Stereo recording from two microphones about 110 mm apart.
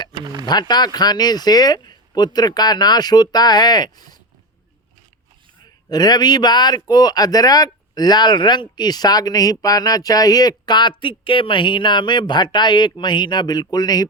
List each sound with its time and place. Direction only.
0.2 s a sound: 40° right (ahead or behind)
0.7 s speech: 40° left (ahead or behind)
5.9 s speech: 40° left (ahead or behind)